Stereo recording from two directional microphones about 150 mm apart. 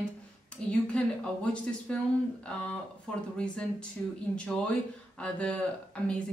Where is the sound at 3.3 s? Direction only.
5° left (ahead or behind).